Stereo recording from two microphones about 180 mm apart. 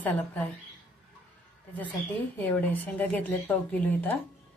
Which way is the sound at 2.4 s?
10° left (ahead or behind).